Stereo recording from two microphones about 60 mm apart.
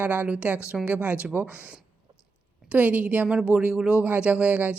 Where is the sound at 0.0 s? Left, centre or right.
Right.